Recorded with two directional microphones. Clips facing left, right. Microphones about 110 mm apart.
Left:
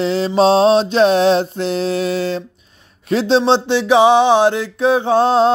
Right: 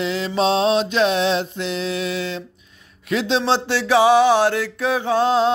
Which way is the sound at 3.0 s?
35° left (ahead or behind).